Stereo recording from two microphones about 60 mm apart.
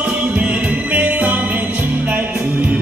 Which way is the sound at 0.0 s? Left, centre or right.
Right.